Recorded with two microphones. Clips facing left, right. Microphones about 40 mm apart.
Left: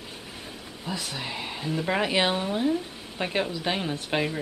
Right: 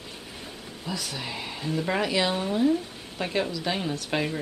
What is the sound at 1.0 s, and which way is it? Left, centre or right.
Speech, centre.